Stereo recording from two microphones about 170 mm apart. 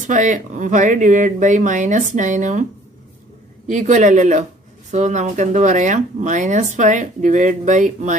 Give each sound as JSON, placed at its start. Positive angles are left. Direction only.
{"t": 0.0, "sound": "speech", "side_deg": -45}
{"t": 3.6, "sound": "speech", "side_deg": -50}